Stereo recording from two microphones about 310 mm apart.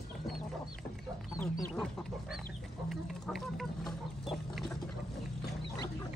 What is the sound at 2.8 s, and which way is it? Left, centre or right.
Chicken, centre.